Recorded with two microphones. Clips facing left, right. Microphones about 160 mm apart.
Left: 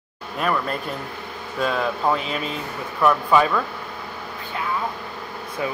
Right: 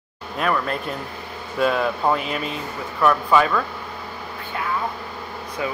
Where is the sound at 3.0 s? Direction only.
5° left (ahead or behind).